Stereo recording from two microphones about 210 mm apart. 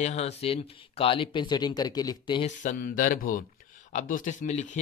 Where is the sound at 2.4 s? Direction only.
40° left (ahead or behind).